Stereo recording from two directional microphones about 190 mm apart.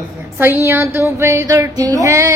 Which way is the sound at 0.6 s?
10° right (ahead or behind).